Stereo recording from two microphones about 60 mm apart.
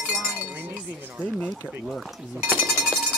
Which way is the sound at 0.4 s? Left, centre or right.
Right.